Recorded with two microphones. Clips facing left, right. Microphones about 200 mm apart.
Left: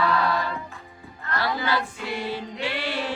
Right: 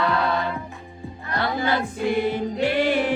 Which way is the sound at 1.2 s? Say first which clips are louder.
Right 2 dB; 20° right (ahead or behind).